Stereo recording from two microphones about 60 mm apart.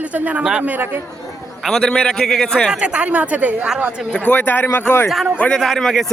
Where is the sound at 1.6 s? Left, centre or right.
Centre.